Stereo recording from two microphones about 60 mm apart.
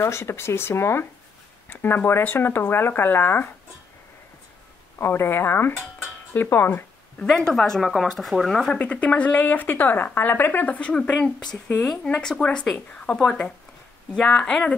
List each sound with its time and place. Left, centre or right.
0.0 s speech: left
1.7 s speech: left
4.9 s speech: left
7.2 s speech: centre
8.7 s speech: left